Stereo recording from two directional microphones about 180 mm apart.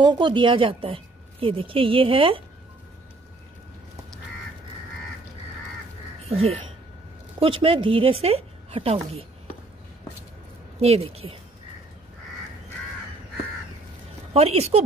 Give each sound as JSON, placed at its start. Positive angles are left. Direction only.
{"t": 0.0, "sound": "a woman's voice", "side_deg": -25}
{"t": 6.2, "sound": "a woman's voice", "side_deg": -35}
{"t": 10.8, "sound": "a woman's voice", "side_deg": -35}
{"t": 14.3, "sound": "a woman's voice", "side_deg": -35}